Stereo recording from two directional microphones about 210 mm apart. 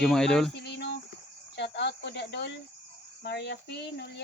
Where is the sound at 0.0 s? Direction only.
5° left (ahead or behind).